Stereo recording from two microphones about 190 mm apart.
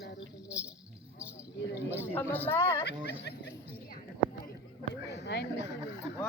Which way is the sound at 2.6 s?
20° left (ahead or behind).